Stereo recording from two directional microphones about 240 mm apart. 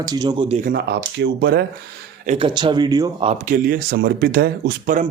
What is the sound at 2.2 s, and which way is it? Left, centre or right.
Speech, right.